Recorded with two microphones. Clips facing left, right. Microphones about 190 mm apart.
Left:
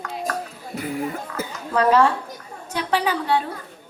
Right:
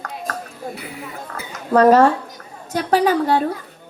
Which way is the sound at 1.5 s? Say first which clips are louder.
Right 6 dB; 40° right (ahead or behind).